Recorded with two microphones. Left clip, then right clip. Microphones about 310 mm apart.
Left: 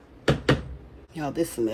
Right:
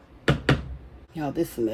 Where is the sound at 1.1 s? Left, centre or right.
Centre.